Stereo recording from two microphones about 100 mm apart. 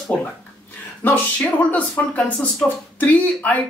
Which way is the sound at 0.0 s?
10° left (ahead or behind).